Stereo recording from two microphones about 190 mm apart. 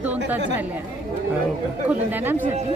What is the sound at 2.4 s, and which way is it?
Speech, 35° right (ahead or behind).